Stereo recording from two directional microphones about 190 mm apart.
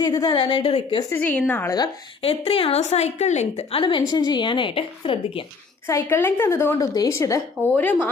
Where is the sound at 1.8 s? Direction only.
30° left (ahead or behind).